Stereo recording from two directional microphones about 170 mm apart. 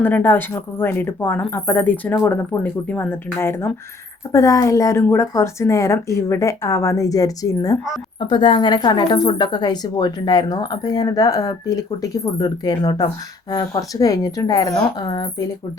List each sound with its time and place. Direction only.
0.0 s a woman's voice: 10° left (ahead or behind)